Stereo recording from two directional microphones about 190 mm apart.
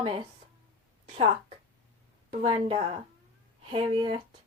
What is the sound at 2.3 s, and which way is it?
Speech, 30° right (ahead or behind).